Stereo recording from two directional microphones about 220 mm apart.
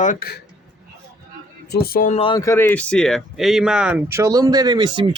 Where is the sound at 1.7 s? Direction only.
45° left (ahead or behind).